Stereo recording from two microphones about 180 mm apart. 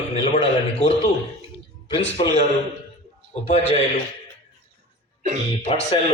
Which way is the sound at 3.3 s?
35° left (ahead or behind).